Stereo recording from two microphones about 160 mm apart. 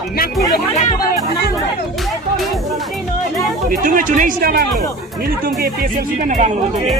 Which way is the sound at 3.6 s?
60° right (ahead or behind).